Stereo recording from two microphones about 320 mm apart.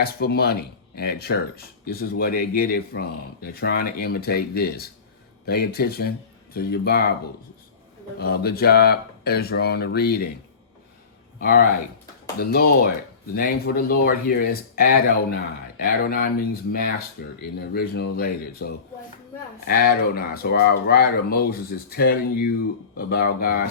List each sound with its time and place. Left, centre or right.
0.0 s speech: left
8.2 s speech: left
11.3 s speech: left